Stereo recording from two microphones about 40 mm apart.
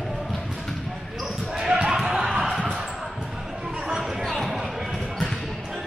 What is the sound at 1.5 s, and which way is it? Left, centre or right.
Basketball bounce, centre.